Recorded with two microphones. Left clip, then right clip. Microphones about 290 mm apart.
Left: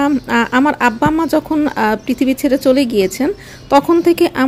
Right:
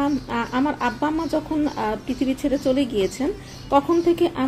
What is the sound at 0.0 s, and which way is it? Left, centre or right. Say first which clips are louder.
Speech: left 9 dB; left.